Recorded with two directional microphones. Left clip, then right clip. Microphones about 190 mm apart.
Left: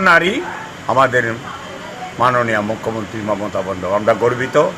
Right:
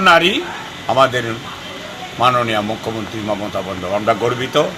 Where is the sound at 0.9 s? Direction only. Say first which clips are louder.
Left 1 dB; 10° left (ahead or behind).